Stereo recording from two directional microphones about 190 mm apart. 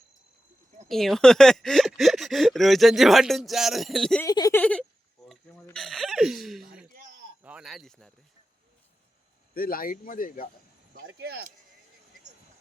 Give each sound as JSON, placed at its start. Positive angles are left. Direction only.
{"t": 0.9, "sound": "speech", "side_deg": 0}
{"t": 4.2, "sound": "speech", "side_deg": 20}
{"t": 4.6, "sound": "speech", "side_deg": 5}
{"t": 6.8, "sound": "a sound", "side_deg": -50}
{"t": 7.4, "sound": "speech", "side_deg": -5}
{"t": 9.6, "sound": "speech", "side_deg": 50}
{"t": 11.0, "sound": "speech", "side_deg": -60}